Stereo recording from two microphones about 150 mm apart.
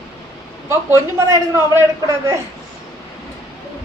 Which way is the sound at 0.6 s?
20° right (ahead or behind).